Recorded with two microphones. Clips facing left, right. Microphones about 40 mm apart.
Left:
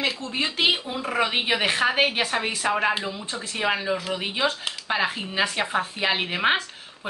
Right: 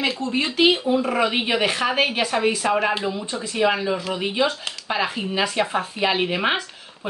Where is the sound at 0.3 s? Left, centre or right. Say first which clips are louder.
Right 5 dB; centre.